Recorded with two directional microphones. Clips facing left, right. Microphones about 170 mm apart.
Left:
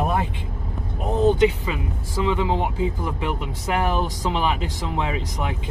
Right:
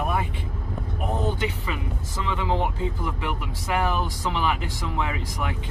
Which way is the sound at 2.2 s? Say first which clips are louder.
Left 3 dB; 15° left (ahead or behind).